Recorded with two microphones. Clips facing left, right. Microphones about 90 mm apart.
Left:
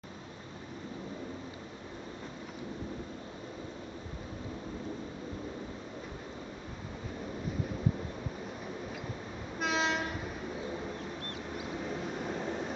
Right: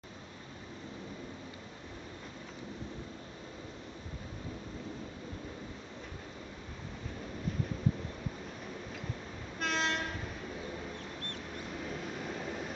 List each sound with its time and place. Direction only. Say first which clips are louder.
9.6 s train: left 2 dB; 5° left (ahead or behind)
11.2 s a sound: left 3 dB; 5° left (ahead or behind)
12.4 s vehicle: left 4 dB; 25° left (ahead or behind)